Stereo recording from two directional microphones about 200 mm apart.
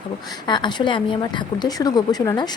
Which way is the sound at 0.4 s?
20° left (ahead or behind).